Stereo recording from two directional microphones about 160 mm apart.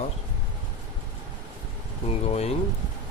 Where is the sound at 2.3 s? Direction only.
40° left (ahead or behind).